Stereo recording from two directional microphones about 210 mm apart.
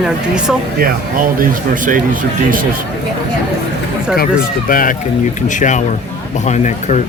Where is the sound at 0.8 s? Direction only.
40° right (ahead or behind).